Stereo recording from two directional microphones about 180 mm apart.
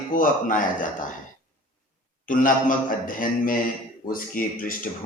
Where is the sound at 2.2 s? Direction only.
45° left (ahead or behind).